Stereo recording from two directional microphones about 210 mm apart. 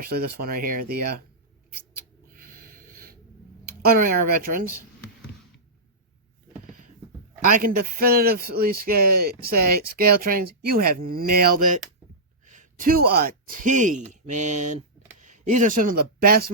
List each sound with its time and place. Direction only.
0.0 s a man's voice: 45° right (ahead or behind)
1.9 s mouse: 40° right (ahead or behind)
3.7 s a man's voice: 45° right (ahead or behind)
7.4 s a man's voice: 40° right (ahead or behind)